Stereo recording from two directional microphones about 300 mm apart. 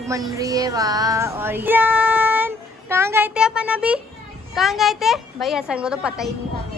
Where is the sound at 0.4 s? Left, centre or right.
Centre.